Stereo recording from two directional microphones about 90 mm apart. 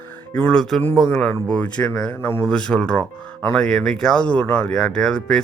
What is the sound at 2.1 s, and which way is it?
Speech, 25° left (ahead or behind).